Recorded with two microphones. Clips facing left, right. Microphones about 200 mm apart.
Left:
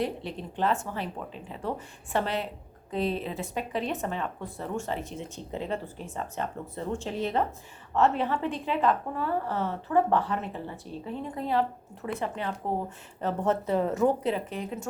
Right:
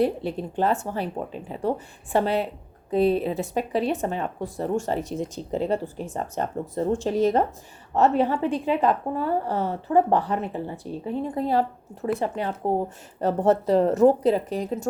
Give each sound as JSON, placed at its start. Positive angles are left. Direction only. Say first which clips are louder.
{"t": 0.3, "sound": "speech", "louder": "right 4 dB", "side_deg": -40}